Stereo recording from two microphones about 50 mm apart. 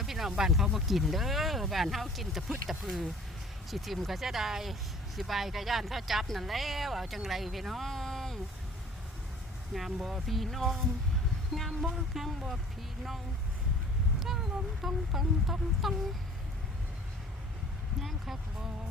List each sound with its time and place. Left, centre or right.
0.0 s speech: centre
9.7 s speech: centre
14.8 s speech: centre
18.0 s speech: centre